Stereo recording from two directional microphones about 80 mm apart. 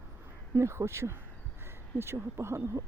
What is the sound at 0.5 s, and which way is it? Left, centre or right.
Speech, right.